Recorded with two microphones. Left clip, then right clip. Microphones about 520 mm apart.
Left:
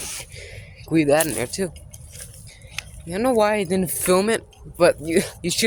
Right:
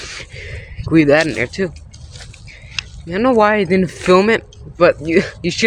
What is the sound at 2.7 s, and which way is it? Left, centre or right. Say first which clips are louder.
Speech: right 7 dB; left.